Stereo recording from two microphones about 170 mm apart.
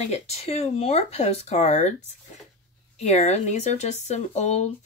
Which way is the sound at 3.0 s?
40° left (ahead or behind).